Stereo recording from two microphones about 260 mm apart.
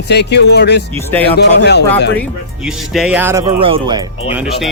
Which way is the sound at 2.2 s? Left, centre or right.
Centre.